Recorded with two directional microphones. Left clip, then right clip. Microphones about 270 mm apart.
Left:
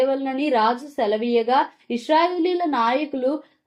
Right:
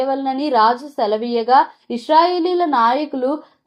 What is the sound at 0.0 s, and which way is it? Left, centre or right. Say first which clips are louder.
A woman's voice: right 2 dB; right.